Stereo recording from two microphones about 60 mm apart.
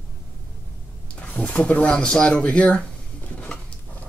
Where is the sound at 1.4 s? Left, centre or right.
Centre.